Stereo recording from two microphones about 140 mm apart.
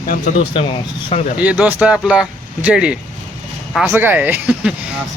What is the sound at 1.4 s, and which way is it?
Speech, 10° right (ahead or behind).